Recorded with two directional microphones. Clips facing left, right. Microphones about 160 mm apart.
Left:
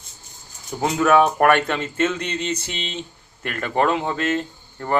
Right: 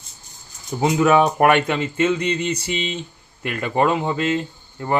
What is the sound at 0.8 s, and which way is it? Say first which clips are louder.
Speech: right 1 dB; 15° right (ahead or behind).